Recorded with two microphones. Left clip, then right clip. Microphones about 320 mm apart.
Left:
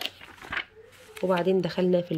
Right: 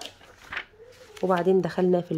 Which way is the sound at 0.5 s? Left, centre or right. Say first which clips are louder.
Left 2 dB; centre.